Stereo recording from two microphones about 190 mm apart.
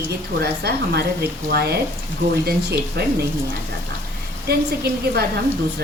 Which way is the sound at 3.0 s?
60° right (ahead or behind).